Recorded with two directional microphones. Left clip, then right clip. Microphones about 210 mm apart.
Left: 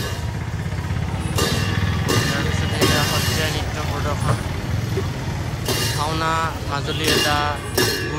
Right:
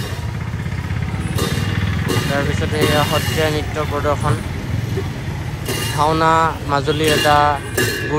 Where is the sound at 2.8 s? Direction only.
5° left (ahead or behind).